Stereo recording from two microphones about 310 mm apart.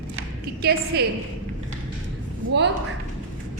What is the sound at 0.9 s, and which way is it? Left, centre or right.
Speech, right.